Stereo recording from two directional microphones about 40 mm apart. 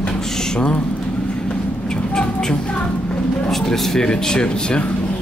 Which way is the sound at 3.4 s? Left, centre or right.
Centre.